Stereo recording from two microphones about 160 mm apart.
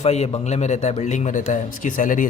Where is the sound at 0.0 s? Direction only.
45° left (ahead or behind).